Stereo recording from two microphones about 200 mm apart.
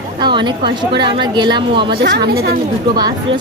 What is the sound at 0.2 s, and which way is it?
A woman's voice, 25° right (ahead or behind).